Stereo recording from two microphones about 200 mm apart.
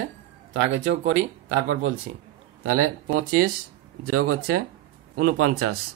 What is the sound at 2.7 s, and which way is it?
A man's voice, 90° right.